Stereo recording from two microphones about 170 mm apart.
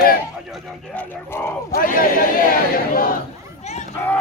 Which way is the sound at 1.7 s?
55° left (ahead or behind).